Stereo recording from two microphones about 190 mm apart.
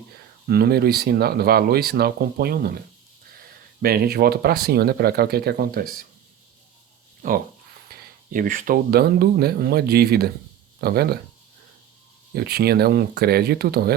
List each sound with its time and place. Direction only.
0.4 s speech: 55° right (ahead or behind)
3.8 s speech: 50° right (ahead or behind)
7.2 s speech: 45° right (ahead or behind)
12.3 s speech: 55° right (ahead or behind)